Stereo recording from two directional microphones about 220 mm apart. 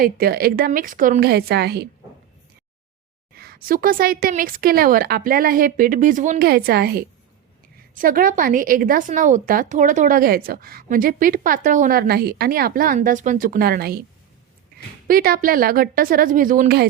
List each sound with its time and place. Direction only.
0.0 s a woman's voice: 45° right (ahead or behind)
3.3 s a woman's voice: 45° right (ahead or behind)
15.0 s a woman's voice: 40° right (ahead or behind)